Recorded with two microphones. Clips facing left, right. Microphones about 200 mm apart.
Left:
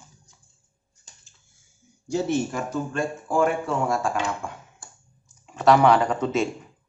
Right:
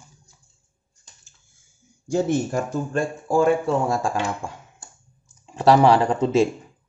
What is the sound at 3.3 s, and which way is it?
A man's voice, 30° right (ahead or behind).